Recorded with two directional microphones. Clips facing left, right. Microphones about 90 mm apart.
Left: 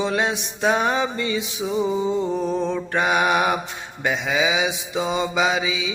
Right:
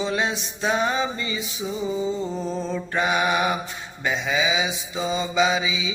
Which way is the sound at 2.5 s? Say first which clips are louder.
Left 4 dB; 60° left (ahead or behind).